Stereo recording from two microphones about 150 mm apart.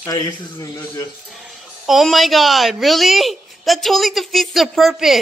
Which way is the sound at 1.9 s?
Centre (ahead or behind).